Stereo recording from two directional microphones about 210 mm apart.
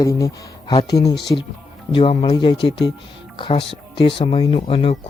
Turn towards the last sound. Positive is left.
turn(degrees=25)  # may be behind; listen again after turning